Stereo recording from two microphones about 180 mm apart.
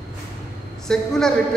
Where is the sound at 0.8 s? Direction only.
5° left (ahead or behind).